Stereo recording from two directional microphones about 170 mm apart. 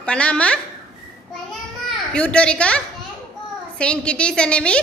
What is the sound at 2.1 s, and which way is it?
A woman's voice, 5° left (ahead or behind).